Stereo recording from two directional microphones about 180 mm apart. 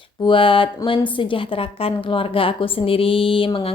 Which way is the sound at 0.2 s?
30° left (ahead or behind).